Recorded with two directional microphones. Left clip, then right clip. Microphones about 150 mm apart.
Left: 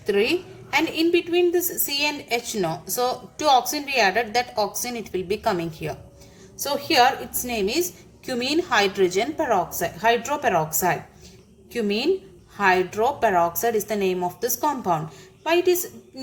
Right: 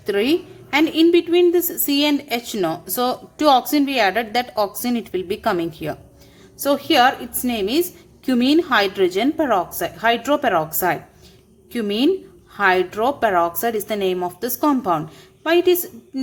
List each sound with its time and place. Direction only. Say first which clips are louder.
0.0 s a woman's voice: right 2 dB; 50° right (ahead or behind)